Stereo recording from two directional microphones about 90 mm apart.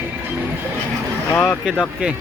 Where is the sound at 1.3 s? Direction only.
15° left (ahead or behind).